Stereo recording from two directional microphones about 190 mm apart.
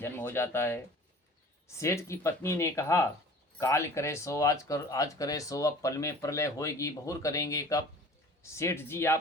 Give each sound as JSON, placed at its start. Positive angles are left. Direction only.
{"t": 0.0, "sound": "speech", "side_deg": 10}